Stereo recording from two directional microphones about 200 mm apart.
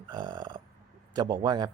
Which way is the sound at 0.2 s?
25° right (ahead or behind).